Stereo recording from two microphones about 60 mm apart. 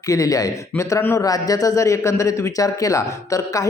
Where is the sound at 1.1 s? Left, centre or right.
Left.